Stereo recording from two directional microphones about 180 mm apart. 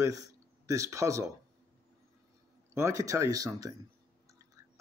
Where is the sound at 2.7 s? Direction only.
15° right (ahead or behind).